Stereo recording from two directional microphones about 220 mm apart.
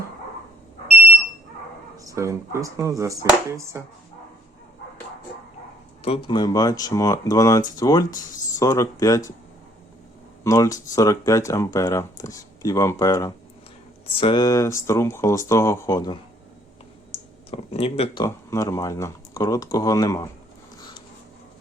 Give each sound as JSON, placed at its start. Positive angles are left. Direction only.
{"t": 2.0, "sound": "speech", "side_deg": -15}
{"t": 6.0, "sound": "speech", "side_deg": 25}
{"t": 10.4, "sound": "speech", "side_deg": 15}